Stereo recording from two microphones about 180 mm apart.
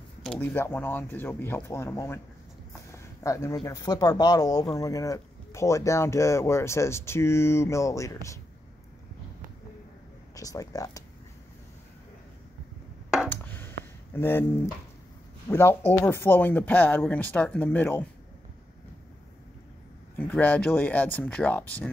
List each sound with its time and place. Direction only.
0.4 s speech: 15° left (ahead or behind)
2.9 s a sound: 15° left (ahead or behind)
3.6 s speech: 20° left (ahead or behind)
10.3 s speech: 20° left (ahead or behind)
13.3 s a sound: 10° left (ahead or behind)
14.1 s speech: 10° left (ahead or behind)
15.4 s speech: 15° left (ahead or behind)
20.2 s speech: 10° left (ahead or behind)